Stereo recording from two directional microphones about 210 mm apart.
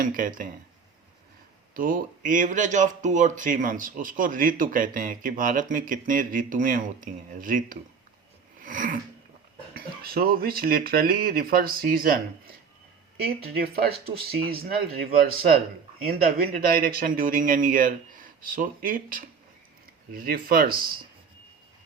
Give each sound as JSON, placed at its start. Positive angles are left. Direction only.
{"t": 0.0, "sound": "speech", "side_deg": -40}
{"t": 1.7, "sound": "speech", "side_deg": -40}
{"t": 13.2, "sound": "speech", "side_deg": -45}
{"t": 16.1, "sound": "speech", "side_deg": -45}